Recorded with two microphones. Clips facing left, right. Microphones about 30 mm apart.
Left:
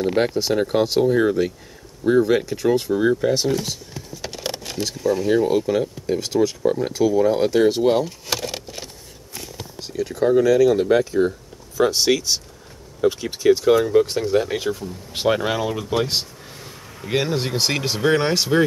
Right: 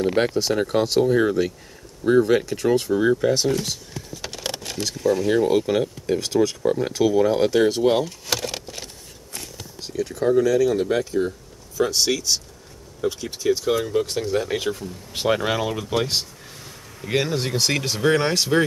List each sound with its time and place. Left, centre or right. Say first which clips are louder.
0.0 s speech: left 1 dB; centre
7.8 s keys jangling: left 1 dB; centre
9.3 s speech: left 2 dB; centre
15.2 s speech: left 1 dB; centre